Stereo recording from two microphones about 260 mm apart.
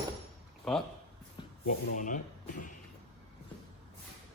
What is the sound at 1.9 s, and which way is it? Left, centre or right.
Speech, left.